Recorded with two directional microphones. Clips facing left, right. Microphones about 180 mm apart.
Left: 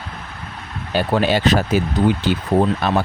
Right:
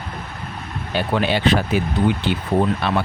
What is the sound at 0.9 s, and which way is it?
Speech, 40° left (ahead or behind).